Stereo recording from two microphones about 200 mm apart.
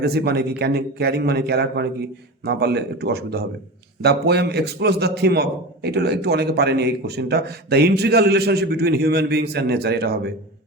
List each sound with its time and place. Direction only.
0.0 s a man's voice: 55° right (ahead or behind)